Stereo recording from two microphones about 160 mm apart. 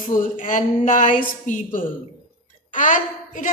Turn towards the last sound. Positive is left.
turn(degrees=55)  # may be behind; listen again after turning